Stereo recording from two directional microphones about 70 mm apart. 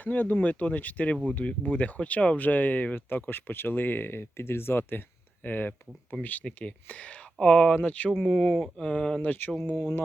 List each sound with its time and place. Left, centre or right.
0.0 s speech: left
8.2 s speech: centre
8.8 s speech: centre